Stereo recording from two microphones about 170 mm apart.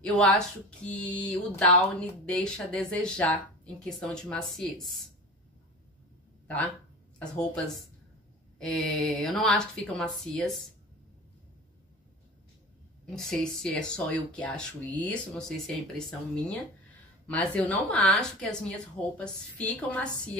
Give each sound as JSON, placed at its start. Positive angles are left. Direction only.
{"t": 0.0, "sound": "speech", "side_deg": 5}
{"t": 6.4, "sound": "speech", "side_deg": 10}
{"t": 8.5, "sound": "speech", "side_deg": 0}
{"t": 13.1, "sound": "speech", "side_deg": 5}